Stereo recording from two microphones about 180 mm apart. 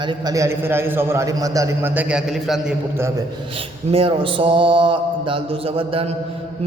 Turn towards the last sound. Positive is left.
turn(degrees=-30)  # may be behind; listen again after turning